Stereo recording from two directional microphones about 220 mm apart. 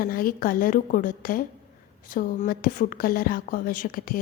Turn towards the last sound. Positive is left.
turn(degrees=40)  # may be behind; listen again after turning